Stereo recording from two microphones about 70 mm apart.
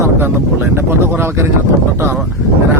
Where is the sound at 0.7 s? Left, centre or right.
Right.